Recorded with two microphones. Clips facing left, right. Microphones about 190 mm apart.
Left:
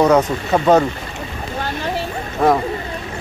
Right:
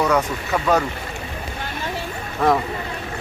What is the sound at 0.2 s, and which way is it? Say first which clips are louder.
Speech: left 6 dB; 40° left (ahead or behind).